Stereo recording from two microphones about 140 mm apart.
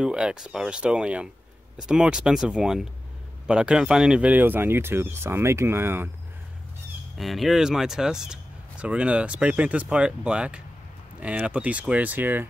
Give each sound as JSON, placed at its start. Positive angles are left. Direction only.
{"t": 0.0, "sound": "speech", "side_deg": -5}
{"t": 7.2, "sound": "speech", "side_deg": 0}